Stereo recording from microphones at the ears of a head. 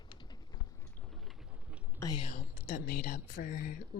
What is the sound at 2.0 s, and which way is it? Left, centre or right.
Speech, left.